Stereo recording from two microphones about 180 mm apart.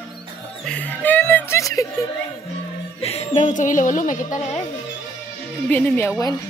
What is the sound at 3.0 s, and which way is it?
Speech, 35° left (ahead or behind).